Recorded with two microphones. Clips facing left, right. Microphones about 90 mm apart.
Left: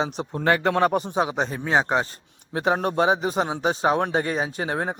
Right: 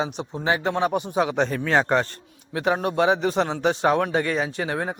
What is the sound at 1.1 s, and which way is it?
Speech, 25° left (ahead or behind).